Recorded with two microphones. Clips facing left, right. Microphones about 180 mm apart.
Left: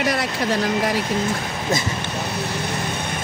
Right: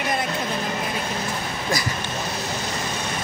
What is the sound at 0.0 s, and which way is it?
Speech, 80° left.